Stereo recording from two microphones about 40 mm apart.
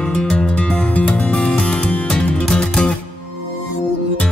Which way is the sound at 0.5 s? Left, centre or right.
Left.